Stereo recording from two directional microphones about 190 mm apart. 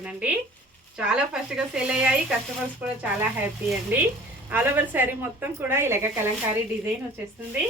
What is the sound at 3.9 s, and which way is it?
A woman's voice, 10° right (ahead or behind).